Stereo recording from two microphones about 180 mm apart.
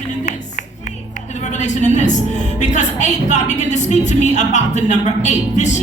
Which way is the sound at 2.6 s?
40° left (ahead or behind).